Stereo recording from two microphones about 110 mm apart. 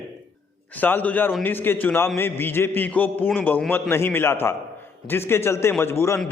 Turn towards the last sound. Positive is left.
turn(degrees=25)  # may be behind; listen again after turning